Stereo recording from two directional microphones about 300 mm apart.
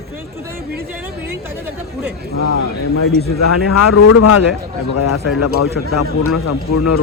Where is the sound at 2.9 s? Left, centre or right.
Left.